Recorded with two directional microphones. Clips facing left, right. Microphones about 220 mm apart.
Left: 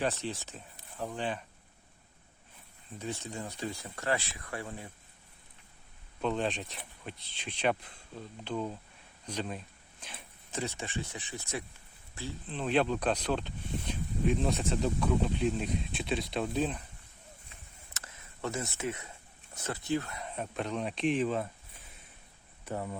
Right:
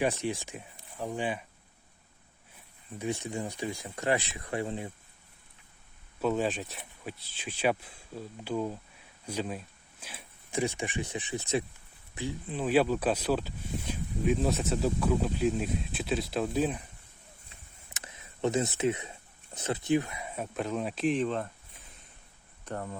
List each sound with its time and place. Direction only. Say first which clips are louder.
0.0 s speech: right 4 dB; 15° right (ahead or behind)
3.0 s speech: right 5 dB; 15° right (ahead or behind)
6.2 s speech: right 3 dB; 5° right (ahead or behind)
17.9 s a sound: right 4 dB; 20° right (ahead or behind)
19.5 s speech: right 5 dB; 20° right (ahead or behind); by 21.5 s 5° left (ahead or behind)
22.6 s speech: even; 10° left (ahead or behind)